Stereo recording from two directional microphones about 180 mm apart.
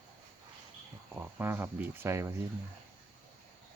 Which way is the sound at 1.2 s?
10° right (ahead or behind).